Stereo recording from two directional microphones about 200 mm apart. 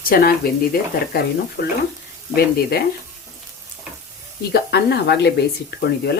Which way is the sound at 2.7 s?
50° left (ahead or behind).